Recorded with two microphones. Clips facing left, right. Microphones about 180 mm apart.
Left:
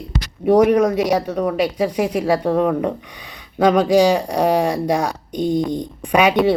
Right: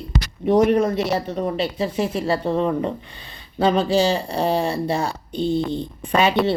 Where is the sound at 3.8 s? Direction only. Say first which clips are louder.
Left 5 dB; 15° left (ahead or behind).